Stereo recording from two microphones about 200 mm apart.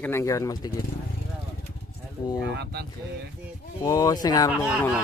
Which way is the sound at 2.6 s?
55° right (ahead or behind).